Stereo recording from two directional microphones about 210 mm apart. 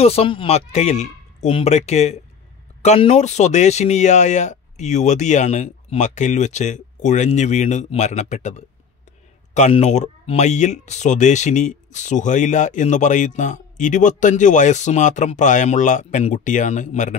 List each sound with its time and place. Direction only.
0.0 s speech: 30° left (ahead or behind)